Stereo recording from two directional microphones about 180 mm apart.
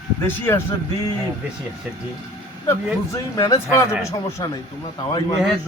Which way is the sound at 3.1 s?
20° left (ahead or behind).